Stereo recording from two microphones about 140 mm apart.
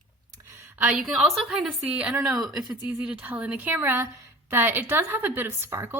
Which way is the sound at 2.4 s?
25° right (ahead or behind).